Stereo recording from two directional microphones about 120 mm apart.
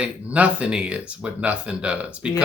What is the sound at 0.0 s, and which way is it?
Speech, 10° right (ahead or behind).